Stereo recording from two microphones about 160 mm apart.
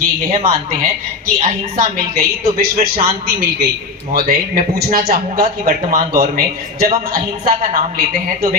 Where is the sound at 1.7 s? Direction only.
70° right (ahead or behind).